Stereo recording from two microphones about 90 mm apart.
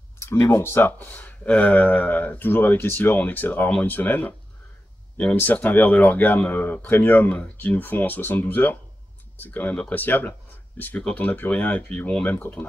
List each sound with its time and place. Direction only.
0.5 s speech: 30° left (ahead or behind)